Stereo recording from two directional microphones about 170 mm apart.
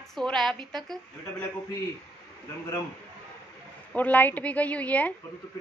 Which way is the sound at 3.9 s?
10° left (ahead or behind).